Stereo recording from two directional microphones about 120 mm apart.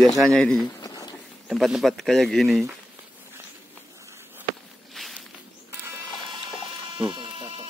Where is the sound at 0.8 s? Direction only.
30° left (ahead or behind).